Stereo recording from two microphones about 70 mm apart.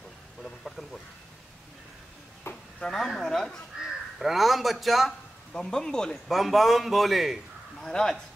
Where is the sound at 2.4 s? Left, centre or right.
Left.